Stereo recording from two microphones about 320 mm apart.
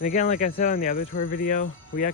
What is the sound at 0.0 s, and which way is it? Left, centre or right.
Speech, left.